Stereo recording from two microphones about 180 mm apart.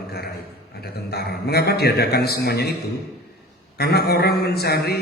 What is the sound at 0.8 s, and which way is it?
A man's voice, 60° left (ahead or behind).